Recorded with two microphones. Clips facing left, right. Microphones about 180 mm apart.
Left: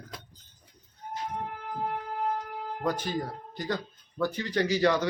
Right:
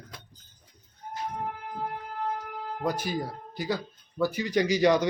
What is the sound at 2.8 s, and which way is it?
Speech, 10° right (ahead or behind).